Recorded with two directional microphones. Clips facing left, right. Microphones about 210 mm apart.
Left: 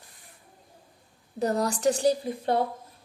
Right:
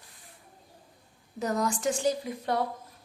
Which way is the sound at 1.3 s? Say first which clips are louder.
Left 3 dB; 35° left (ahead or behind).